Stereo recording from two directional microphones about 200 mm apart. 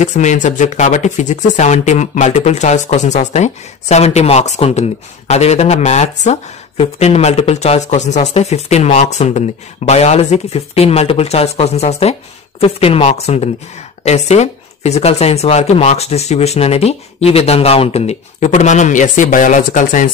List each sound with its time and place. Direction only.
0.0 s speech: 35° left (ahead or behind)